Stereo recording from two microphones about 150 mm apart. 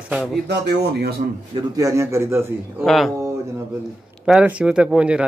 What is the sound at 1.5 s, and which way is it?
A man's voice, 25° right (ahead or behind).